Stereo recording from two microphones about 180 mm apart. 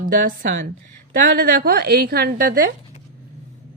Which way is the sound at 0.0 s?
50° right (ahead or behind).